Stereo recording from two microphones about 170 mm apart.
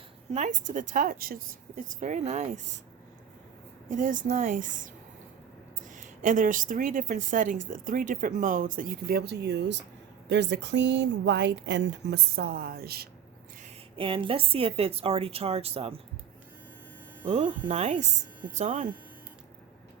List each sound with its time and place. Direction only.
0.3 s a woman's voice: 40° right (ahead or behind)
3.8 s a woman's voice: 50° right (ahead or behind); by 13.1 s 65° right (ahead or behind)
13.9 s a woman's voice: 30° right (ahead or behind)
17.2 s a woman's voice: 40° right (ahead or behind)